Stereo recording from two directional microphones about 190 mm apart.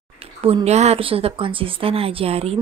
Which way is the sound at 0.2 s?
30° right (ahead or behind).